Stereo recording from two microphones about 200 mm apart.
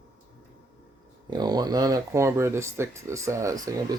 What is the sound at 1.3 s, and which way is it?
Speech, 20° right (ahead or behind).